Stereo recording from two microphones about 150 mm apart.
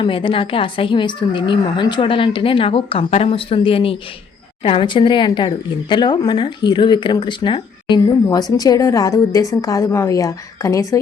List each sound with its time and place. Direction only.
0.0 s a woman's voice: 35° left (ahead or behind)